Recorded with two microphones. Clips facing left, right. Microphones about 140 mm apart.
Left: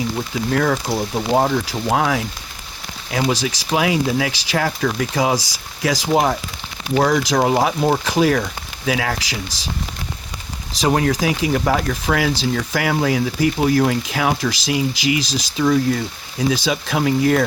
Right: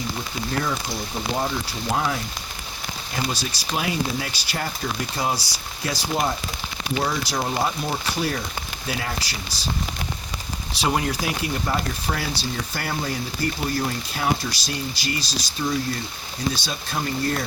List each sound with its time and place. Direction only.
0.6 s speech: 70° left (ahead or behind); by 9.6 s 90° left
10.8 s speech: 75° left (ahead or behind); by 17.2 s 90° left